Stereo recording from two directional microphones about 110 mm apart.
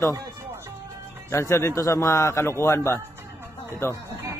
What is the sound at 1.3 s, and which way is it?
A man's voice, 25° left (ahead or behind).